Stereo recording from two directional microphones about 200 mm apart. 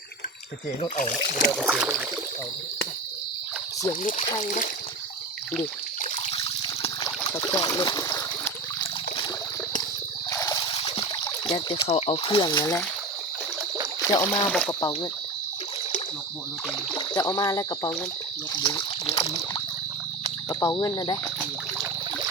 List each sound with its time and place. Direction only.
0.8 s speech: 40° left (ahead or behind)
1.5 s boat: centre (ahead or behind)
4.4 s speech: 40° left (ahead or behind)
6.3 s water: 25° left (ahead or behind)
7.3 s a sound: 20° left (ahead or behind)
10.3 s a sound: 15° left (ahead or behind)
14.1 s speech: 15° left (ahead or behind)
16.9 s speech: 20° left (ahead or behind)
18.5 s water: 25° left (ahead or behind)
20.5 s speech: 15° left (ahead or behind)